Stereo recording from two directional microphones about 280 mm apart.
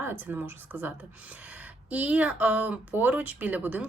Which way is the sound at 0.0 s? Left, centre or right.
Centre.